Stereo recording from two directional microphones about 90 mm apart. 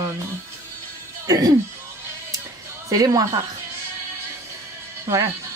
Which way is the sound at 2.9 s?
45° right (ahead or behind).